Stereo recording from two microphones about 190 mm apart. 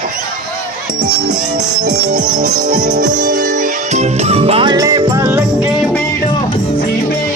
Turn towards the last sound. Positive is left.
turn(degrees=-5)  # may be behind; listen again after turning